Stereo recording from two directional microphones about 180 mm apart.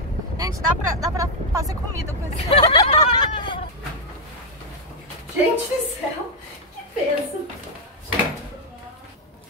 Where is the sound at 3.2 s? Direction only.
25° left (ahead or behind).